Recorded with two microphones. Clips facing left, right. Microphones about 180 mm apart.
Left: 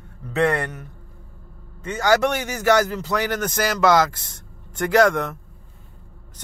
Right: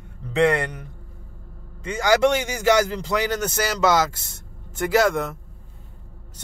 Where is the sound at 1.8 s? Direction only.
15° right (ahead or behind).